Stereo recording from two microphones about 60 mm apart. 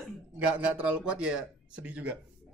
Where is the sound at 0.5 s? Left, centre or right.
Right.